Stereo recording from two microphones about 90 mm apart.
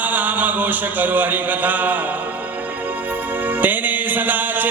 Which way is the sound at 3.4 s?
20° right (ahead or behind).